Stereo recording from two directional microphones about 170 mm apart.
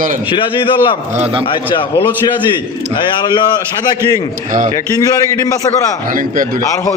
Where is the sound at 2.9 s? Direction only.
25° left (ahead or behind).